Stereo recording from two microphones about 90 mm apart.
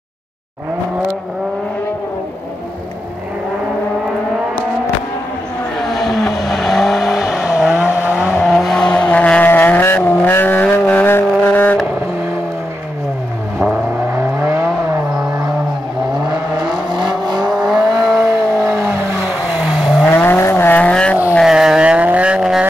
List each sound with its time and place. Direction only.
5.8 s vehicle: centre (ahead or behind); by 11.8 s 20° left (ahead or behind)
13.7 s vehicle: 10° right (ahead or behind)
14.4 s vehicle: 30° right (ahead or behind)
17.5 s vehicle: centre (ahead or behind)
17.8 s vehicle: 40° right (ahead or behind)
19.4 s vehicle: 10° right (ahead or behind)
20.1 s vehicle: 25° left (ahead or behind)
21.5 s vehicle: 5° right (ahead or behind)